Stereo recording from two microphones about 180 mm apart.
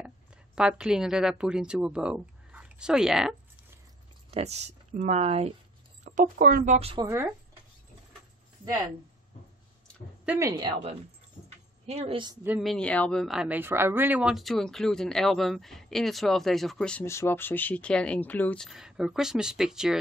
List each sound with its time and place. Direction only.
0.6 s speech: 5° right (ahead or behind)
4.3 s speech: 35° right (ahead or behind)
6.0 s speech: 45° right (ahead or behind)
10.4 s a woman's voice: 25° right (ahead or behind)
11.4 s a sound: 35° right (ahead or behind)
12.4 s speech: centre (ahead or behind)